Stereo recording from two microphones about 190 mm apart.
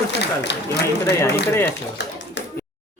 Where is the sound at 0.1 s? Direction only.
65° left (ahead or behind).